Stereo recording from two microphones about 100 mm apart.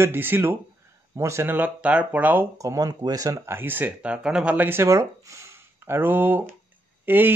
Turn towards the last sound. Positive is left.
turn(degrees=-20)  # may be behind; listen again after turning